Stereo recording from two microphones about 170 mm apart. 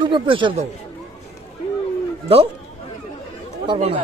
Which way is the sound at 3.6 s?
30° right (ahead or behind).